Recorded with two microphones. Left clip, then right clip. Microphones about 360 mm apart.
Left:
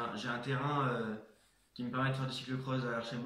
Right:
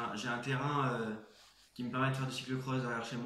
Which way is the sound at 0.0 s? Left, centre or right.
Centre.